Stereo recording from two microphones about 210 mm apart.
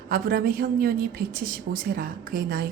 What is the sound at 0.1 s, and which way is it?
A woman's voice, 45° right (ahead or behind).